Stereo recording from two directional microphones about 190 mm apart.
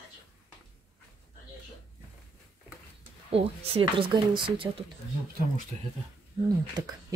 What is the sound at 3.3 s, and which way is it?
Speech, 30° right (ahead or behind).